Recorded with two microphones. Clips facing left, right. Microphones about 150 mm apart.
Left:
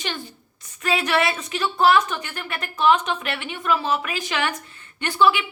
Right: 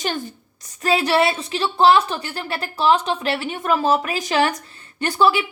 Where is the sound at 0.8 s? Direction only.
35° right (ahead or behind).